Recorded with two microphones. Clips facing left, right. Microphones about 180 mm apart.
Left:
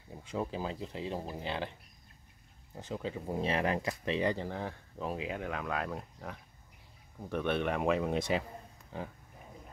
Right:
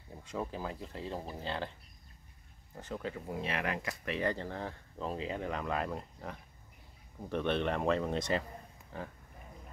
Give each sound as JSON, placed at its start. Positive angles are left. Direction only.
{"t": 0.1, "sound": "speech", "side_deg": 15}
{"t": 3.3, "sound": "speech", "side_deg": 30}